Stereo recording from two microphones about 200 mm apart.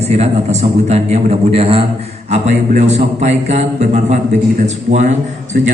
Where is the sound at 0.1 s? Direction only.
35° right (ahead or behind).